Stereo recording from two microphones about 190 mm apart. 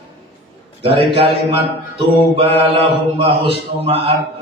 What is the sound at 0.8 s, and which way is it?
A man's voice, 30° right (ahead or behind).